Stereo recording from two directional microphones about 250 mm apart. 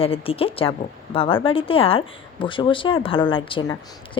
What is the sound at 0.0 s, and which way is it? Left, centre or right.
Speech, left.